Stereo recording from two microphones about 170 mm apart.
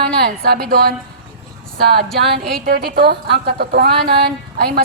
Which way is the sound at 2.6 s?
60° right (ahead or behind).